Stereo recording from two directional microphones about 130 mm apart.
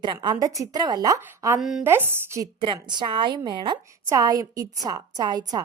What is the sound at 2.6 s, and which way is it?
A woman's voice, 35° right (ahead or behind).